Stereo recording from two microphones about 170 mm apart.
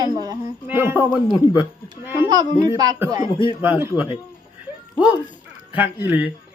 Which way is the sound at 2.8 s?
20° right (ahead or behind).